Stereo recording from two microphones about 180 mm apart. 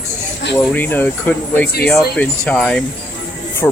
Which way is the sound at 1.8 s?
5° left (ahead or behind).